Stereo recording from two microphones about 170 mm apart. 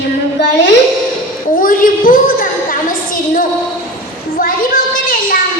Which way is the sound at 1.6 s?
55° left (ahead or behind).